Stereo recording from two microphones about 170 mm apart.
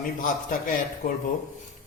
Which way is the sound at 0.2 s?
50° left (ahead or behind).